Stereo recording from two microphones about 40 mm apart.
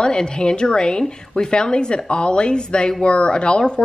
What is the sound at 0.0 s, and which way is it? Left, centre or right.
Speech, left.